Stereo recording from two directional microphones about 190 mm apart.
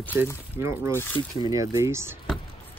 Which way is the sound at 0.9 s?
10° left (ahead or behind).